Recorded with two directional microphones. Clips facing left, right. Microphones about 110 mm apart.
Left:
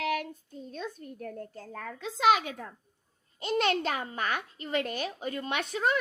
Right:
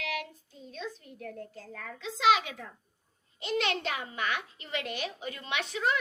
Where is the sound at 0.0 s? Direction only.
45° left (ahead or behind).